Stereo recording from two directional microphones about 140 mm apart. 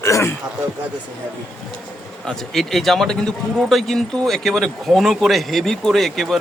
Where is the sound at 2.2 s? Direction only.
Centre (ahead or behind).